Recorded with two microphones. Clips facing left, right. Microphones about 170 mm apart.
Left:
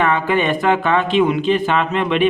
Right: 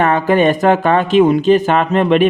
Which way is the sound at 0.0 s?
40° right (ahead or behind).